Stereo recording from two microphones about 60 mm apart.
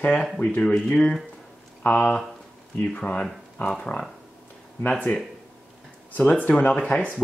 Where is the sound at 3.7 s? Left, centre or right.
Centre.